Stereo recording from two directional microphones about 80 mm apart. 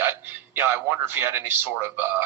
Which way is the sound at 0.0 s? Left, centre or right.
Right.